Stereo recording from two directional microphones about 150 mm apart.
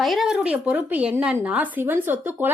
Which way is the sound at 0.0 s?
Centre (ahead or behind).